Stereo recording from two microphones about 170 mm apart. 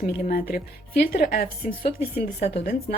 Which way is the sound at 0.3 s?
60° left (ahead or behind).